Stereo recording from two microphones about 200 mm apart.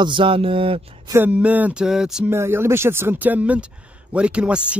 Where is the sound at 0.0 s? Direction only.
25° right (ahead or behind).